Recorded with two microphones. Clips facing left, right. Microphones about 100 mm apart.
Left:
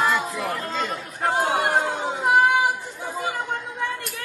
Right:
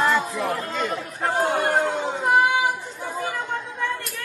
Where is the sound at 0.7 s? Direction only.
20° left (ahead or behind).